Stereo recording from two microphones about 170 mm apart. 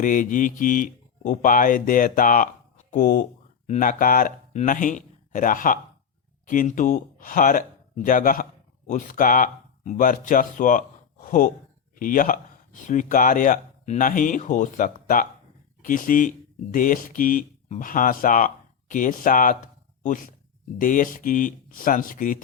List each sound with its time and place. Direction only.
0.0 s speech: 50° left (ahead or behind)